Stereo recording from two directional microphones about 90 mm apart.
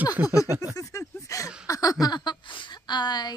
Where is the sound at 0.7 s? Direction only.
35° left (ahead or behind).